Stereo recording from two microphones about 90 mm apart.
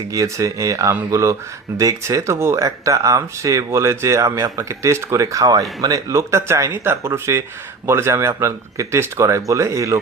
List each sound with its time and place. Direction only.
0.1 s speech: 40° right (ahead or behind)